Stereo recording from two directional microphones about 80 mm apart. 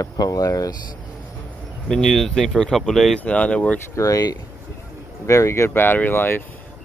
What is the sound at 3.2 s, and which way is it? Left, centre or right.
Speech, centre.